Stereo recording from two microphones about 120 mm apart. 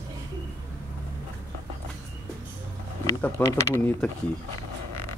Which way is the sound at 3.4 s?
20° left (ahead or behind).